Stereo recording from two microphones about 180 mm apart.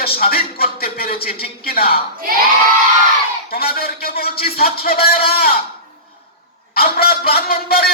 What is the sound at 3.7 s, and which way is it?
Speech, 55° left (ahead or behind).